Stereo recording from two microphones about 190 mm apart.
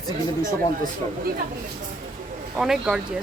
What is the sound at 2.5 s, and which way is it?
Speech, 5° right (ahead or behind).